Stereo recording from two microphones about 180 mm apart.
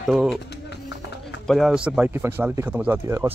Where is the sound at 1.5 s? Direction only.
Centre (ahead or behind).